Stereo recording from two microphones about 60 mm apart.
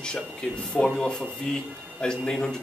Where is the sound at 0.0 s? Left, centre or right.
Centre.